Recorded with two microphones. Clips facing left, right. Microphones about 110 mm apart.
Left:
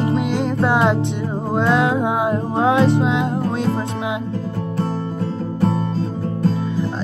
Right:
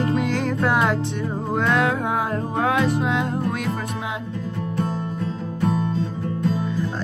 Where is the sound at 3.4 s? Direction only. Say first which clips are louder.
Left 5 dB; 30° left (ahead or behind).